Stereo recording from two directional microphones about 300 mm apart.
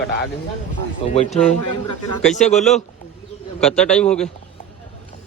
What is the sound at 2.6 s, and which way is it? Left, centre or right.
Speech, centre.